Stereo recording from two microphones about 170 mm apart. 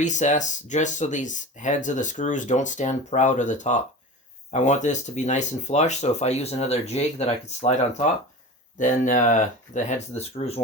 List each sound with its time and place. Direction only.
0.0 s speech: 45° left (ahead or behind)